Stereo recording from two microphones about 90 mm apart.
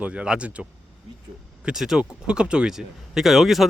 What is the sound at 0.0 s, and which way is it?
Speech, 15° right (ahead or behind).